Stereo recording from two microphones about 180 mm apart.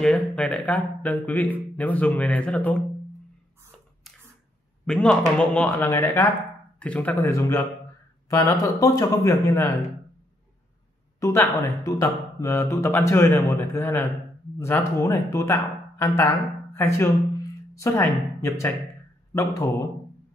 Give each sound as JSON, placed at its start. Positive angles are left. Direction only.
{"t": 0.0, "sound": "speech", "side_deg": 5}
{"t": 4.8, "sound": "a man's voice", "side_deg": 5}
{"t": 11.1, "sound": "speech", "side_deg": 15}